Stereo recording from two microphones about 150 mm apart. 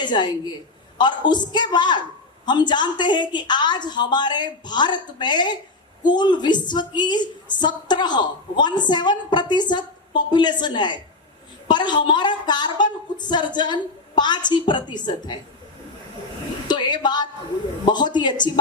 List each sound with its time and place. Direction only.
0.0 s a woman's voice: 30° left (ahead or behind)
16.6 s a sound: 30° left (ahead or behind)
17.8 s a woman's voice: 30° left (ahead or behind)